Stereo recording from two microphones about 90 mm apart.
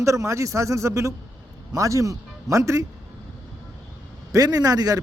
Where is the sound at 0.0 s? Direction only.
35° right (ahead or behind).